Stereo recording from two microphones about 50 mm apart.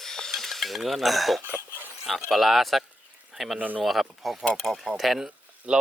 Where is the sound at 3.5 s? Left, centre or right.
Right.